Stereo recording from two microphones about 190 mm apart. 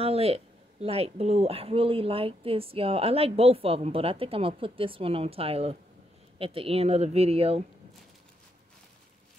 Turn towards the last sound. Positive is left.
turn(degrees=-30)  # may be behind; listen again after turning